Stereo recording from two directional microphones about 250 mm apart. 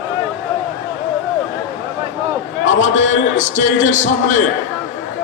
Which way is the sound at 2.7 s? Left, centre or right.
Left.